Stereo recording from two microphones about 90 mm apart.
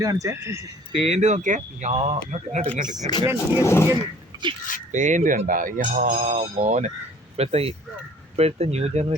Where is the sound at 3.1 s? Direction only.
50° left (ahead or behind).